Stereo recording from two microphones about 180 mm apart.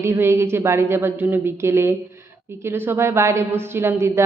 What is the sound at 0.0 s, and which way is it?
A woman's voice, 15° right (ahead or behind).